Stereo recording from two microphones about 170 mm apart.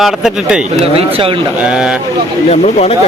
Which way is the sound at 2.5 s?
40° left (ahead or behind).